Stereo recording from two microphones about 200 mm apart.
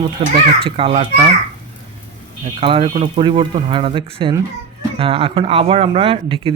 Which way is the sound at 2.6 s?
25° right (ahead or behind).